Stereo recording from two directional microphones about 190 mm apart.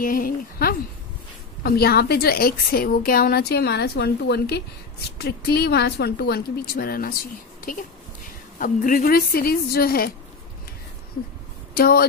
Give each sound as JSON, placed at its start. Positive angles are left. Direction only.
{"t": 0.0, "sound": "a woman's voice", "side_deg": 50}
{"t": 8.5, "sound": "a woman's voice", "side_deg": 45}
{"t": 11.7, "sound": "speech", "side_deg": 55}